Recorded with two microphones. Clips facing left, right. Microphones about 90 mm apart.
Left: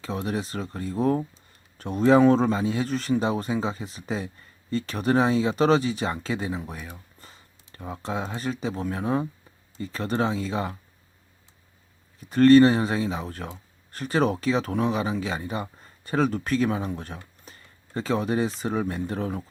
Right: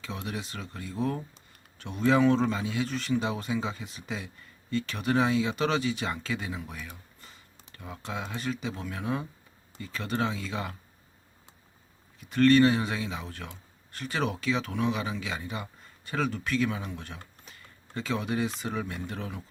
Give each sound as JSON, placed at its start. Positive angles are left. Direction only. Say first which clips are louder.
{"t": 0.0, "sound": "speech", "louder": "left 7 dB", "side_deg": 40}
{"t": 12.2, "sound": "speech", "louder": "left 6 dB", "side_deg": 35}